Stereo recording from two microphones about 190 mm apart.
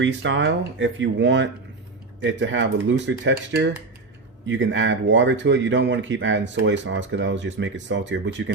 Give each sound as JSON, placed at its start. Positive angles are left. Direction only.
{"t": 0.0, "sound": "speech", "side_deg": -75}
{"t": 4.4, "sound": "speech", "side_deg": -80}